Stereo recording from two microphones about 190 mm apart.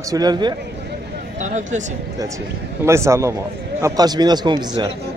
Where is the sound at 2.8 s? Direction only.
15° right (ahead or behind).